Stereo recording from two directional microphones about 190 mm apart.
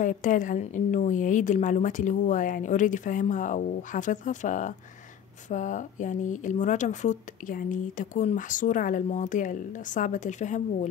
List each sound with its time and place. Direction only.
0.0 s a woman's voice: 45° left (ahead or behind)